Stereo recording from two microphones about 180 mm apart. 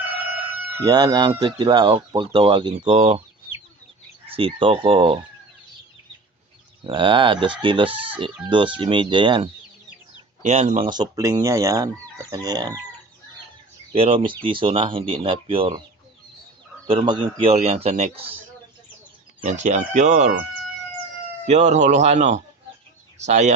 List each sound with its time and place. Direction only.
0.9 s chicken: 20° right (ahead or behind)
4.4 s chicken: 30° right (ahead or behind)
6.8 s chicken: 30° right (ahead or behind)
10.4 s chicken: 40° right (ahead or behind); by 12.8 s 20° right (ahead or behind)
13.9 s chicken: 30° right (ahead or behind)
16.8 s a man's voice: 30° right (ahead or behind)
19.5 s a man's voice: 40° right (ahead or behind)
21.4 s a man's voice: 40° right (ahead or behind)